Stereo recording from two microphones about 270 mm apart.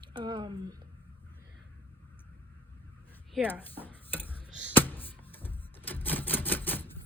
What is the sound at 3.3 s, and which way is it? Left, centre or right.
Dishes, centre.